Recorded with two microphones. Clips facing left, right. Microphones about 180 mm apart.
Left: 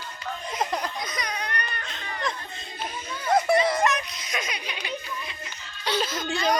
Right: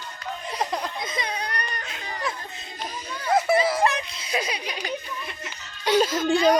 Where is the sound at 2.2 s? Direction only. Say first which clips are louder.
Even; 5° right (ahead or behind).